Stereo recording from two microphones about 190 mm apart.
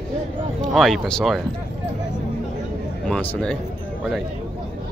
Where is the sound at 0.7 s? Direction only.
Centre (ahead or behind).